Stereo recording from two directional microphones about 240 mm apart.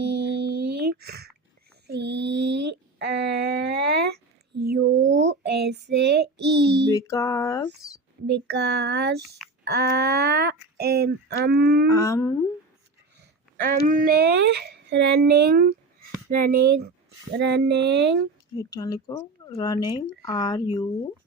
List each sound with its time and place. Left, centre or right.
0.0 s a sound: right
4.7 s child singing: right
6.9 s speech: centre
8.3 s speech: right
11.9 s speech: centre
13.8 s speech: right
18.5 s speech: centre